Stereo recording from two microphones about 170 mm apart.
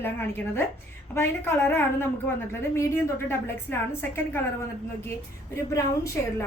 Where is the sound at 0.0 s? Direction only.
15° left (ahead or behind).